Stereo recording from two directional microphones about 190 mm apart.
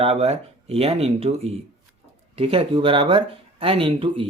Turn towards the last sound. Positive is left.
turn(degrees=-30)  # may be behind; listen again after turning